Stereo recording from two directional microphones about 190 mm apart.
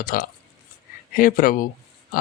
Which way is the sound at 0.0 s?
50° left (ahead or behind).